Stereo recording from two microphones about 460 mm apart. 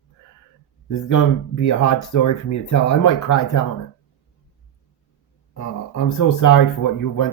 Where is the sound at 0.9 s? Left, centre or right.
Left.